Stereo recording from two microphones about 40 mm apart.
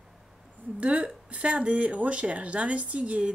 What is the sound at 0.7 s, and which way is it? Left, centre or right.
A woman's voice, right.